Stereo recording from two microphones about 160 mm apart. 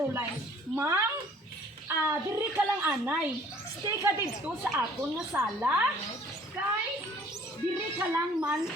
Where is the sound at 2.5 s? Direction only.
10° right (ahead or behind).